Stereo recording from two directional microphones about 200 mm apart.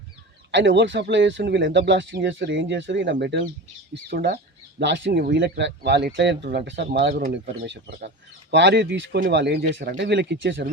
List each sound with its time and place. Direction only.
0.5 s speech: 65° right (ahead or behind)
7.3 s speech: 45° right (ahead or behind)
7.7 s speech: 55° right (ahead or behind)